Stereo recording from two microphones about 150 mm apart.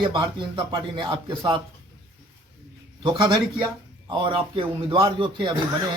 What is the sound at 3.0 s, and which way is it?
Speech, 30° right (ahead or behind).